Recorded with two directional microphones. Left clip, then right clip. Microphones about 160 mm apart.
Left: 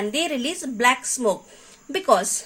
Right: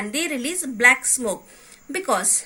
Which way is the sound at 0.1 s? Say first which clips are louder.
Left 1 dB; 50° left (ahead or behind).